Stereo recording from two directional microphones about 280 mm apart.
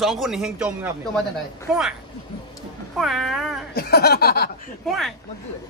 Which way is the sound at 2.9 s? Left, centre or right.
Centre.